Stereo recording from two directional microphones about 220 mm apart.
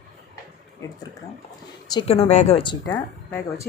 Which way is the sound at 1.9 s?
25° left (ahead or behind).